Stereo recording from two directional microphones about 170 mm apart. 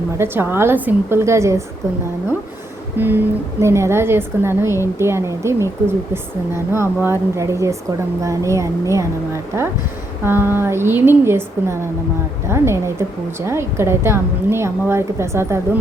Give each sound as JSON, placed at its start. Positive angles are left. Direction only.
{"t": 0.2, "sound": "a woman's voice", "side_deg": -15}
{"t": 3.0, "sound": "a woman's voice", "side_deg": -10}